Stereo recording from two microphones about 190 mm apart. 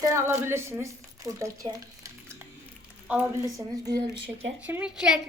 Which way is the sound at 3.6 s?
20° right (ahead or behind).